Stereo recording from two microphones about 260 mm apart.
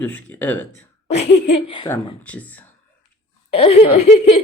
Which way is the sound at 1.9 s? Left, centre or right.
Centre.